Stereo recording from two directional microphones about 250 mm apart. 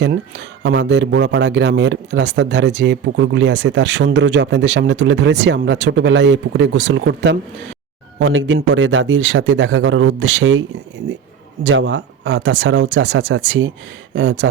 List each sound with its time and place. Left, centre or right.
0.0 s speech: right
11.6 s speech: right